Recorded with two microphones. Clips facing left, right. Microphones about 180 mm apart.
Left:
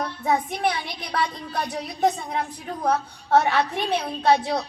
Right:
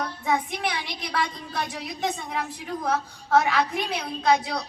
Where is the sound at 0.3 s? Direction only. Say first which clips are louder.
Left 4 dB; 40° left (ahead or behind).